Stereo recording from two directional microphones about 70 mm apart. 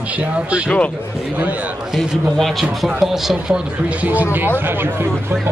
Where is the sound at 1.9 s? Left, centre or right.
Centre.